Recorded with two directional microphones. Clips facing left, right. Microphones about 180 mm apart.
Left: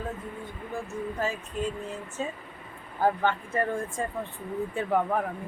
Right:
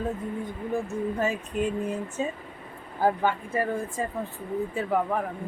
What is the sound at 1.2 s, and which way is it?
Speech, 20° right (ahead or behind).